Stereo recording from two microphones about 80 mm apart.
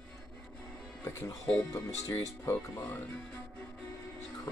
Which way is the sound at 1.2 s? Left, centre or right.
Left.